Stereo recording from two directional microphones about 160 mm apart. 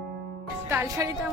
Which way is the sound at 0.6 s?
20° right (ahead or behind).